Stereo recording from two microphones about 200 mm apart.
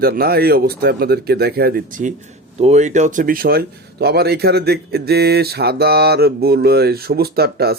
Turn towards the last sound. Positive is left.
turn(degrees=-50)  # may be behind; listen again after turning